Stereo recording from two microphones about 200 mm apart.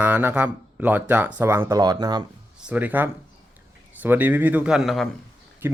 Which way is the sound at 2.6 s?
5° right (ahead or behind).